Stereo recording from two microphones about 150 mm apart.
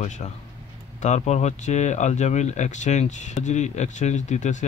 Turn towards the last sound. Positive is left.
turn(degrees=50)  # may be behind; listen again after turning